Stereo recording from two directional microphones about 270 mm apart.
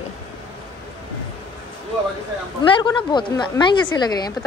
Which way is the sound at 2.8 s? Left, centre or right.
Centre.